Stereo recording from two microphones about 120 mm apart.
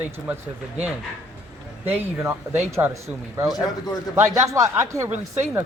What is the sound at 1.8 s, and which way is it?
Speech, 20° right (ahead or behind).